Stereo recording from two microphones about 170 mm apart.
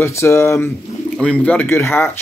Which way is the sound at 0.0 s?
15° left (ahead or behind).